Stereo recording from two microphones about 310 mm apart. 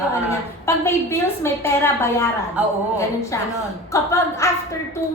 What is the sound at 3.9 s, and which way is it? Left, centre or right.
Speech, centre.